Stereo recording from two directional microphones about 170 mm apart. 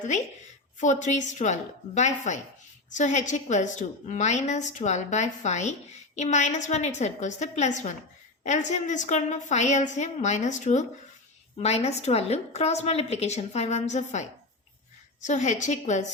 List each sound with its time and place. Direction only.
0.8 s a woman's voice: 45° left (ahead or behind)